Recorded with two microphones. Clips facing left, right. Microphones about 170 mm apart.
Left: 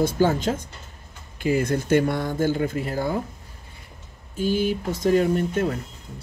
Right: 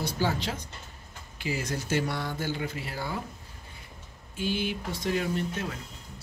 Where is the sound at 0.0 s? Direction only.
50° left (ahead or behind).